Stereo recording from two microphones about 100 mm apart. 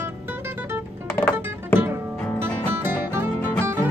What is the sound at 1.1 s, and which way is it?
Music, 20° left (ahead or behind).